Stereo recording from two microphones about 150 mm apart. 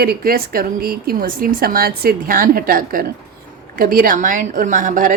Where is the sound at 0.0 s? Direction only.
90° right.